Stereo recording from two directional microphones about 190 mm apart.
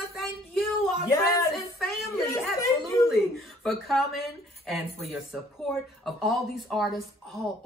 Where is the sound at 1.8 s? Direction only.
Centre (ahead or behind).